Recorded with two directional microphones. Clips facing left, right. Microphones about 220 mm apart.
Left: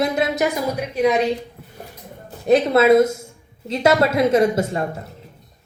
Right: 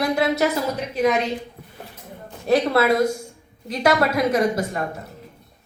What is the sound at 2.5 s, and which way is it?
A woman's voice, 20° left (ahead or behind).